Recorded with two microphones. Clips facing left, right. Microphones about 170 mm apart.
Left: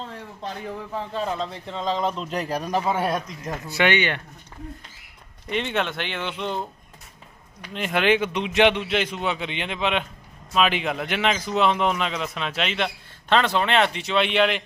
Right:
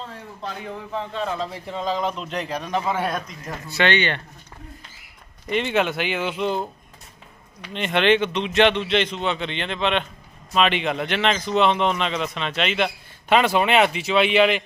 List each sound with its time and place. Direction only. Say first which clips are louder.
1.3 s speech: right 1 dB; 5° right (ahead or behind)
2.3 s a man's voice: left 1 dB; 40° left (ahead or behind)
3.2 s a man's voice: left 2 dB; 15° left (ahead or behind)
5.5 s speech: right 4 dB; centre (ahead or behind)
7.7 s a man's voice: right 2 dB; 5° left (ahead or behind)